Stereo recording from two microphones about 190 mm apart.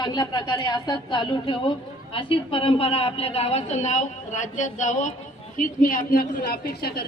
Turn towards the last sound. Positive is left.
turn(degrees=55)  # may be behind; listen again after turning